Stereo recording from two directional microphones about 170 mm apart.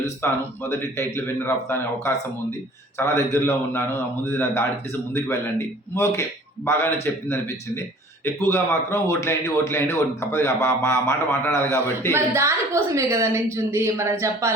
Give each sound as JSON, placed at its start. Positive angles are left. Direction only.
{"t": 0.2, "sound": "a man's voice", "side_deg": 15}
{"t": 12.1, "sound": "a woman's voice", "side_deg": -15}